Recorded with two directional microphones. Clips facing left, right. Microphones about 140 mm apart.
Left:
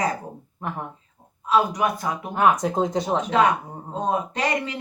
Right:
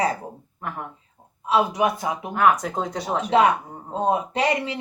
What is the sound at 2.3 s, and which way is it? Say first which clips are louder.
Speech: even; 25° left (ahead or behind).